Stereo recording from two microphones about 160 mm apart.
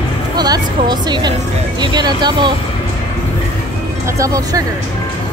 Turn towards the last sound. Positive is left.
turn(degrees=-20)  # may be behind; listen again after turning